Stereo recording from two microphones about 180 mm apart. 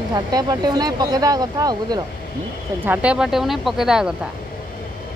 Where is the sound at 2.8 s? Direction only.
10° right (ahead or behind).